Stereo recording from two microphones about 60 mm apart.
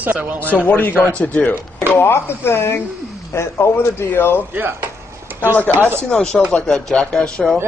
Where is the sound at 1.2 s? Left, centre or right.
Left.